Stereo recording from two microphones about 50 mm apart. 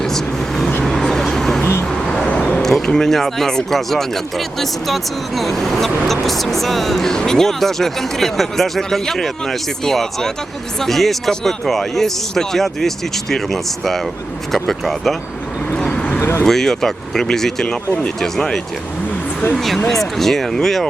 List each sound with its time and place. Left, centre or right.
0.0 s vehicle: centre
2.6 s speech: centre
15.9 s vehicle: left
16.4 s speech: centre